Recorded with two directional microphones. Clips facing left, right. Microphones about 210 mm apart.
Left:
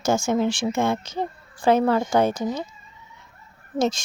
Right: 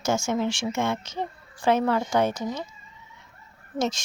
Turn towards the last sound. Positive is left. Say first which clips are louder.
# left 4 dB
turn(degrees=30)  # may be behind; listen again after turning